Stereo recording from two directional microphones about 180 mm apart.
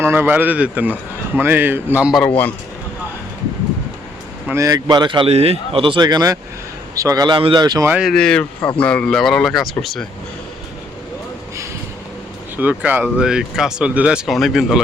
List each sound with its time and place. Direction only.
0.0 s speech: 10° right (ahead or behind)
2.2 s a man's voice: 10° left (ahead or behind)
4.4 s speech: 15° right (ahead or behind)
7.9 s speech: 5° right (ahead or behind)
12.5 s speech: 10° right (ahead or behind)